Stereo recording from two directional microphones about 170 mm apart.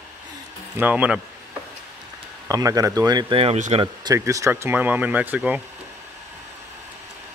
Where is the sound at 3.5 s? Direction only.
45° right (ahead or behind).